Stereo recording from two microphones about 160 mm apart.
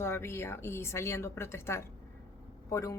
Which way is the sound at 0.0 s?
15° left (ahead or behind).